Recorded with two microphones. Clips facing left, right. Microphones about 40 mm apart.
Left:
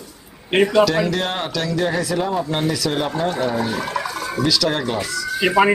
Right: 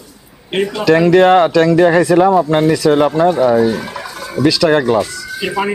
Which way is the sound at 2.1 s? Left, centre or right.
Right.